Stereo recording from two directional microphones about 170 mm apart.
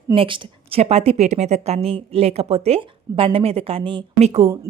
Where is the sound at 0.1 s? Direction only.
30° right (ahead or behind).